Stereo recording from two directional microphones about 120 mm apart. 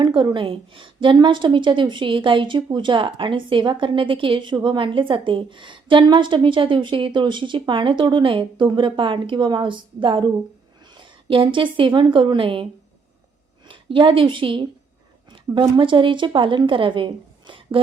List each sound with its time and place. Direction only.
0.0 s a woman's voice: 40° right (ahead or behind)
13.7 s a woman's voice: 45° right (ahead or behind)